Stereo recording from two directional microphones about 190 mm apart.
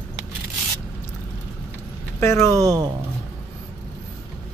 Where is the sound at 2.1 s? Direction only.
15° left (ahead or behind).